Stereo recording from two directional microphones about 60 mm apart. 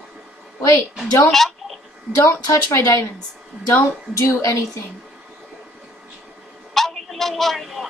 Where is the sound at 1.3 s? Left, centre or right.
Centre.